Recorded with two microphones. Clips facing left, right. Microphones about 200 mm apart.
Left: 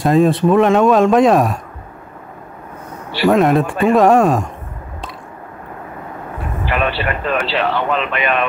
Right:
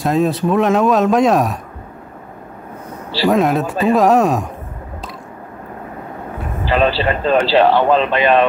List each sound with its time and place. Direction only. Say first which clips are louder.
0.0 s speech: left 3 dB; centre (ahead or behind)
3.3 s speech: left 2 dB; centre (ahead or behind)
6.6 s a man's voice: right 4 dB; 30° right (ahead or behind)